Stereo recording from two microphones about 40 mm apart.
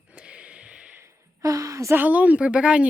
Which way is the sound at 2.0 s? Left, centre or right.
Right.